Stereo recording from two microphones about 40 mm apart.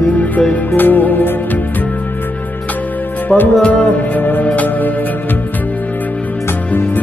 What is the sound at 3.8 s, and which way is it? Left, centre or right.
Music, left.